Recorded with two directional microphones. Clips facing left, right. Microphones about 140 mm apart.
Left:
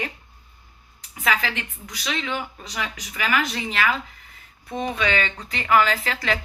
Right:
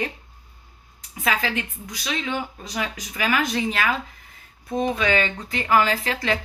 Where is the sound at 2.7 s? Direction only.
35° right (ahead or behind).